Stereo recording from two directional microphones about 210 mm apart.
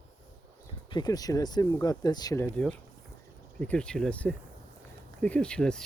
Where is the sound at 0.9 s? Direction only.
20° left (ahead or behind).